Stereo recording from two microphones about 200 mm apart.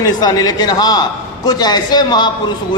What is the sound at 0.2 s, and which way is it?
A man's voice, 20° left (ahead or behind).